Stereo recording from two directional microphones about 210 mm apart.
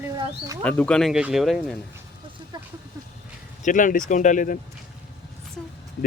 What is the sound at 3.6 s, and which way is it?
Speech, 40° left (ahead or behind).